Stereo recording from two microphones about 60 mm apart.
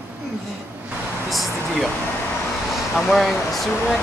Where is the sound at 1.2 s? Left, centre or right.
Centre.